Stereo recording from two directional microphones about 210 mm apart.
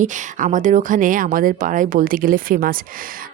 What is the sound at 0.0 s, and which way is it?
Speech, 35° right (ahead or behind).